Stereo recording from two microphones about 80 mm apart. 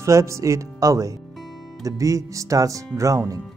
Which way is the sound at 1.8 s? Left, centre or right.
Right.